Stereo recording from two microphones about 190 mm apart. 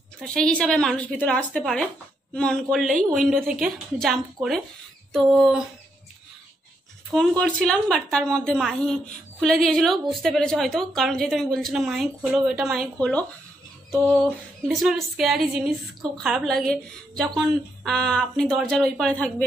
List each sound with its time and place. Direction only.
0.2 s a woman's voice: 5° left (ahead or behind)
7.1 s a woman's voice: 5° left (ahead or behind)